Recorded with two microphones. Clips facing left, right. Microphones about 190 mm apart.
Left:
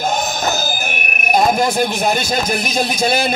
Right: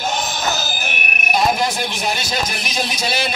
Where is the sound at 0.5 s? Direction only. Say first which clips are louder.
Left 3 dB; 50° left (ahead or behind).